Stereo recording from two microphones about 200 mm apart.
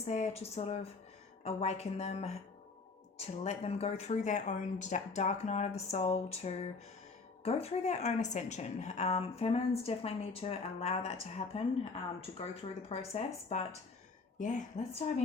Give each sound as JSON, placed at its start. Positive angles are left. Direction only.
{"t": 0.0, "sound": "a woman's voice", "side_deg": 35}
{"t": 12.9, "sound": "a woman's voice", "side_deg": 30}